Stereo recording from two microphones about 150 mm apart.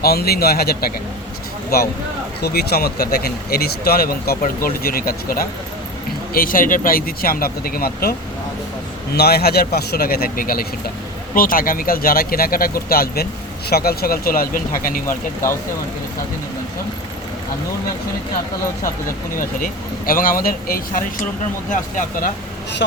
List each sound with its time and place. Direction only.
0.0 s speech: 90° left
9.1 s speech: 90° left; by 15.0 s 65° left (ahead or behind)
20.1 s speech: 70° left (ahead or behind)
21.7 s speech: 60° left (ahead or behind)